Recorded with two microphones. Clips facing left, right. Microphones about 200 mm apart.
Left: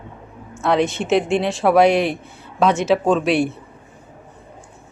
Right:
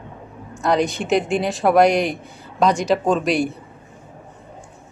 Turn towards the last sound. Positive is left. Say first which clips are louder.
# left 2 dB
turn(degrees=0)  # may be behind; listen again after turning